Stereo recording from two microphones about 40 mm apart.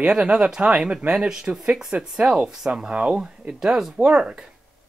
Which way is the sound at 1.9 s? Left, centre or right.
Right.